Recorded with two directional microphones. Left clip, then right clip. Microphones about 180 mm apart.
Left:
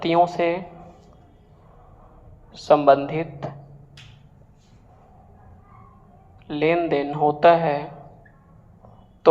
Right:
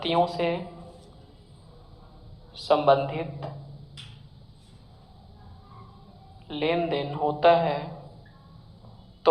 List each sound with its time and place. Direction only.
0.0 s a man's voice: 20° left (ahead or behind)
2.5 s a man's voice: 20° left (ahead or behind)
6.5 s a man's voice: 20° left (ahead or behind)
9.2 s a man's voice: 20° left (ahead or behind)